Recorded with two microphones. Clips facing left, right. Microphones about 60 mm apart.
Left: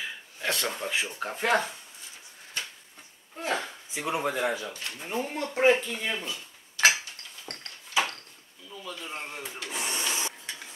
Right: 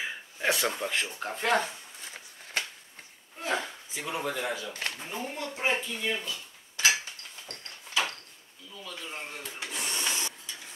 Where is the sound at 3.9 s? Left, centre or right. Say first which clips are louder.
Left 4 dB; left.